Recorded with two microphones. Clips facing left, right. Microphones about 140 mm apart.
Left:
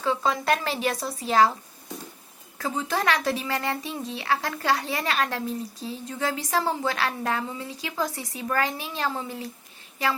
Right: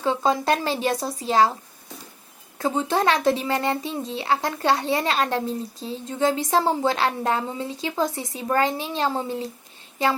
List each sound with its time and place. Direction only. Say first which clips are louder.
0.0 s speech: right 3 dB; 25° right (ahead or behind)
2.6 s speech: right 5 dB; 25° right (ahead or behind)